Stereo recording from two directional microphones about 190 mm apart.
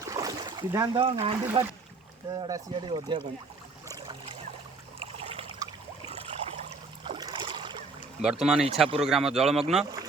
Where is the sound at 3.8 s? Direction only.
25° right (ahead or behind).